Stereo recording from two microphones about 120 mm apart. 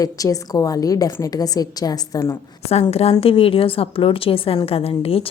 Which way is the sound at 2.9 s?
55° left (ahead or behind).